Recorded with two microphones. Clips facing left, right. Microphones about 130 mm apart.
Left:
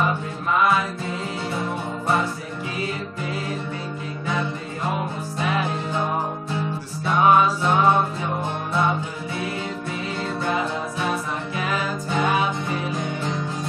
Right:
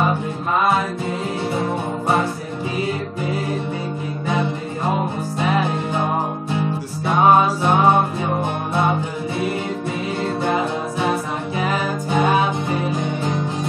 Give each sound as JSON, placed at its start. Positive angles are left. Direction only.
{"t": 0.6, "sound": "music", "side_deg": -25}
{"t": 4.3, "sound": "music", "side_deg": -25}
{"t": 7.1, "sound": "music", "side_deg": -30}
{"t": 10.4, "sound": "music", "side_deg": -25}